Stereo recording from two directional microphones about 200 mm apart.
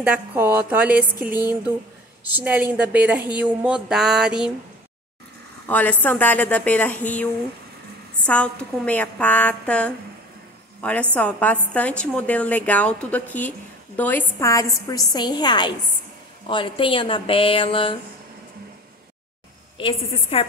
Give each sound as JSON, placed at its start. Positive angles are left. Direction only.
{"t": 0.0, "sound": "a woman's voice", "side_deg": -10}
{"t": 3.6, "sound": "a sound", "side_deg": -5}
{"t": 5.7, "sound": "a woman's voice", "side_deg": 10}
{"t": 8.3, "sound": "a woman's voice", "side_deg": 5}
{"t": 19.8, "sound": "speech", "side_deg": 30}